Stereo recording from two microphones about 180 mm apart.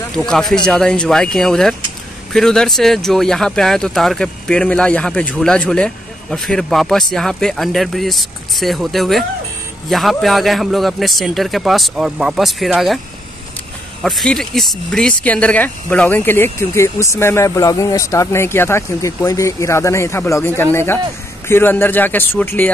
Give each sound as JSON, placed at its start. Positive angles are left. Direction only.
{"t": 0.1, "sound": "speech", "side_deg": 5}
{"t": 14.0, "sound": "speech", "side_deg": 5}